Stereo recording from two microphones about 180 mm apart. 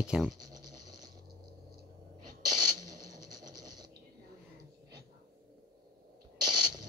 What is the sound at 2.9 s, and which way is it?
Sewing machine, 20° right (ahead or behind).